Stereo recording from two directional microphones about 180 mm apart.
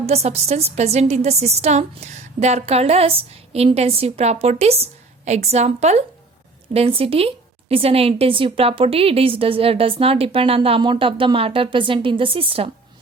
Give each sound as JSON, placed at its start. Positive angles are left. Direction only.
{"t": 0.0, "sound": "a woman's voice", "side_deg": -35}